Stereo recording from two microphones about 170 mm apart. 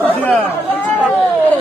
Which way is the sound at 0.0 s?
10° left (ahead or behind).